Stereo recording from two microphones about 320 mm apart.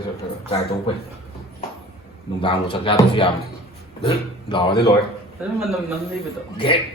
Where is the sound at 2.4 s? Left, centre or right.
Centre.